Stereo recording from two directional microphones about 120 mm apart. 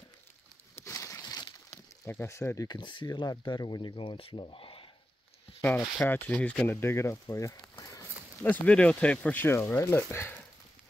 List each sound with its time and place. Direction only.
0.7 s a sound: 25° left (ahead or behind)
2.0 s speech: 20° left (ahead or behind)
2.8 s speech: 40° left (ahead or behind)
5.9 s speech: 15° left (ahead or behind)
6.8 s speech: 20° left (ahead or behind)
7.7 s walk: 30° left (ahead or behind)
8.4 s speech: 15° left (ahead or behind)